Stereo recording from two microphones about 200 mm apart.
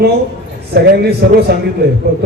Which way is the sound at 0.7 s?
50° right (ahead or behind).